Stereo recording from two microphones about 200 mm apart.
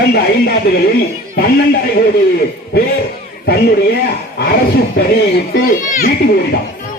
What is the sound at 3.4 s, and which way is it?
Speech, 50° left (ahead or behind).